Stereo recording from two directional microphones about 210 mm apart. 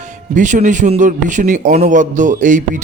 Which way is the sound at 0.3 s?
35° right (ahead or behind).